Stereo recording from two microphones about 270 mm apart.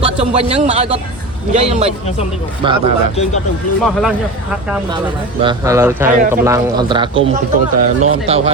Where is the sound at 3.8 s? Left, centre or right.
Centre.